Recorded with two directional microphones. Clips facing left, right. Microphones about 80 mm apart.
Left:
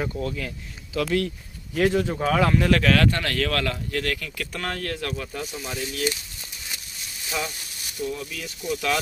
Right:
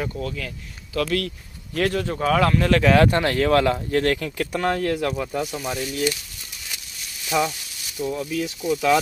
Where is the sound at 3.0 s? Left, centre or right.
Right.